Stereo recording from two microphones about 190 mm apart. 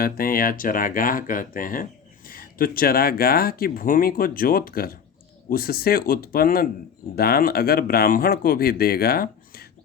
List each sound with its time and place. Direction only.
0.0 s speech: 50° left (ahead or behind)